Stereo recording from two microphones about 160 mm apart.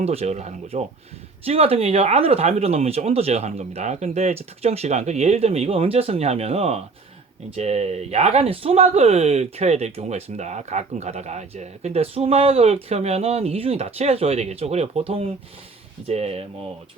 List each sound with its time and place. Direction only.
0.0 s speech: 40° right (ahead or behind)